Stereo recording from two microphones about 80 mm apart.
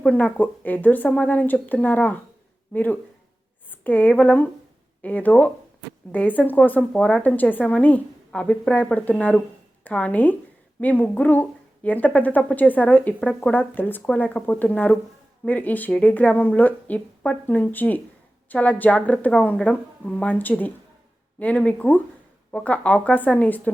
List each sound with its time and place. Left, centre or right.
0.0 s a woman's voice: centre
13.5 s a woman's voice: left